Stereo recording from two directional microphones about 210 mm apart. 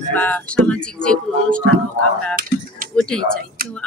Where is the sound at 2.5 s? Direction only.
45° left (ahead or behind).